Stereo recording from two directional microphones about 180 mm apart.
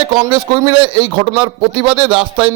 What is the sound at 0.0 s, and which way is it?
A man's voice, 25° right (ahead or behind).